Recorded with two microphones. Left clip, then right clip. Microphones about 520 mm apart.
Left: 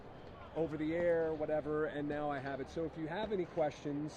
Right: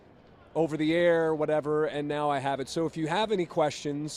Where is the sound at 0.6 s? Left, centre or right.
Right.